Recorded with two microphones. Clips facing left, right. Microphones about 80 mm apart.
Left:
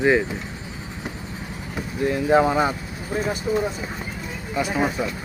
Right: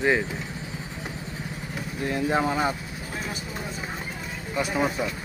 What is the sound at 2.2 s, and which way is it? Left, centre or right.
Speech, centre.